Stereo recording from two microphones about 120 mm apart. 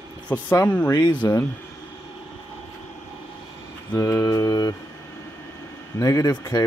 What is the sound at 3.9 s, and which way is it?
Speech, 20° left (ahead or behind).